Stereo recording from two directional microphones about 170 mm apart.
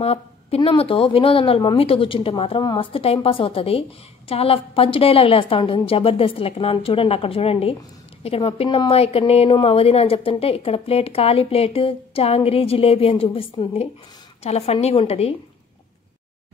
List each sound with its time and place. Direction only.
0.0 s a woman's voice: 35° left (ahead or behind)